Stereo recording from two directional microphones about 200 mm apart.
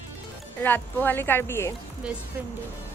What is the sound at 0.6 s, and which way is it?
A woman's voice, 10° left (ahead or behind).